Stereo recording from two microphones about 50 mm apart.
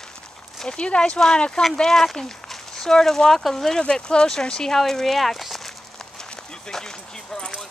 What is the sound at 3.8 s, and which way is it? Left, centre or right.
Speech, centre.